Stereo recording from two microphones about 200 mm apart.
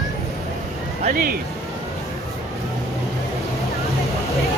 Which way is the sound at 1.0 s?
45° right (ahead or behind).